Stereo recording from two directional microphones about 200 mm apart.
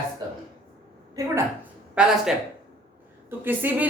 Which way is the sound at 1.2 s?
15° right (ahead or behind).